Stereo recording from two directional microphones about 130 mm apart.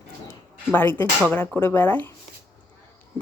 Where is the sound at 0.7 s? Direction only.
15° left (ahead or behind).